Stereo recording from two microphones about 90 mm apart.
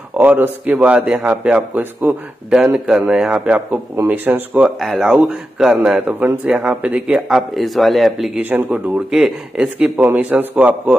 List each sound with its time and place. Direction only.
0.2 s a man's voice: 15° right (ahead or behind)
2.6 s a man's voice: 10° right (ahead or behind)
4.6 s a man's voice: centre (ahead or behind)
7.2 s speech: 5° right (ahead or behind)
8.4 s a man's voice: 20° right (ahead or behind)